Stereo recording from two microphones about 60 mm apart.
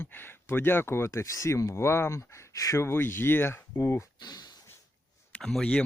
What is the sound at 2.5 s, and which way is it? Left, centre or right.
Speech, left.